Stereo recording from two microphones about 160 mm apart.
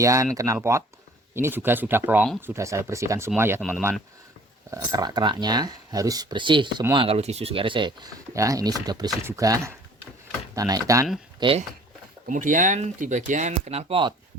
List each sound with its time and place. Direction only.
0.0 s speech: 20° right (ahead or behind)
4.7 s speech: 25° right (ahead or behind)
11.3 s speech: 35° right (ahead or behind)
12.3 s speech: 55° right (ahead or behind); by 14.1 s 35° right (ahead or behind)